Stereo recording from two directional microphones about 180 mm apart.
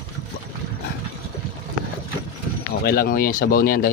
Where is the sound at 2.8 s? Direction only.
55° left (ahead or behind).